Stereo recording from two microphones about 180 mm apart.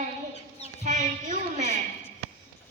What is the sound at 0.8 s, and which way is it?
Speech, 45° right (ahead or behind).